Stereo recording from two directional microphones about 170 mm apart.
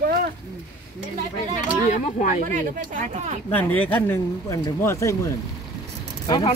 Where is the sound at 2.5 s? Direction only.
50° right (ahead or behind).